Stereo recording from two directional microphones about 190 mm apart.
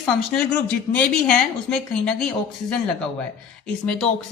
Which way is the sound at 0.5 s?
10° left (ahead or behind).